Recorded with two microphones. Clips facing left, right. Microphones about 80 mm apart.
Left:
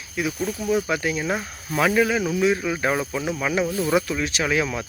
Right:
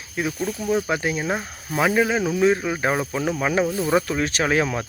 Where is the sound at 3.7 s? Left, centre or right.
Centre.